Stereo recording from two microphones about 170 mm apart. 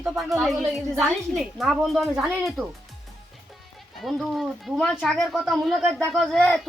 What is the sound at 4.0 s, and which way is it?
Speech, centre (ahead or behind).